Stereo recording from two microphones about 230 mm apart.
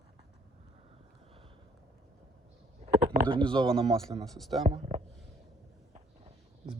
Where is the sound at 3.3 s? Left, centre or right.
Right.